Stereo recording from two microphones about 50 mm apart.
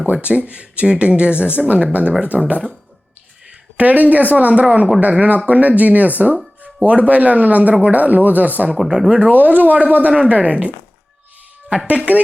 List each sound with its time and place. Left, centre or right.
0.0 s speech: right
3.8 s speech: right
8.7 s speech: centre
9.0 s speech: centre
9.3 s speech: right
11.9 s speech: right